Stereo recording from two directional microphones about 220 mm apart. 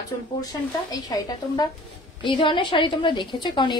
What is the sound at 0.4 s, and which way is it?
A woman's voice, 15° left (ahead or behind).